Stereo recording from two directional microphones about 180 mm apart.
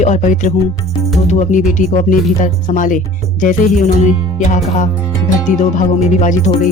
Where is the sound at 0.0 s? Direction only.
45° left (ahead or behind).